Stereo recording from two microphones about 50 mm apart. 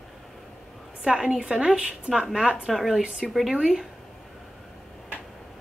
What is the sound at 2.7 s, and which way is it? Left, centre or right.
A woman's voice, centre.